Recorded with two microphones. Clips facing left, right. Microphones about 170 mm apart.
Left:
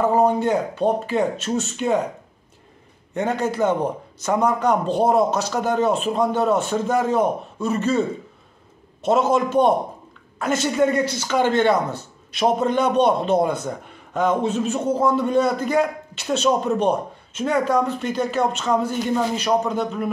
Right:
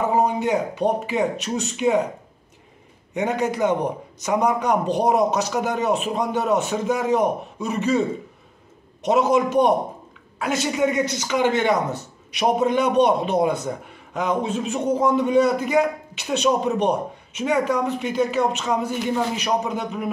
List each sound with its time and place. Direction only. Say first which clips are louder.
0.4 s a man's voice: left 1 dB; 15° right (ahead or behind)
3.2 s a man's voice: even; 15° right (ahead or behind)
9.0 s a man's voice: even; 15° right (ahead or behind)